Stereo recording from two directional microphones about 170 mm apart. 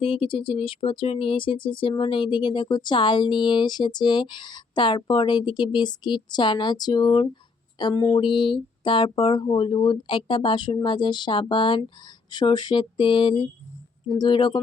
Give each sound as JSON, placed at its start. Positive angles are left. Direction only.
{"t": 0.0, "sound": "speech", "side_deg": 30}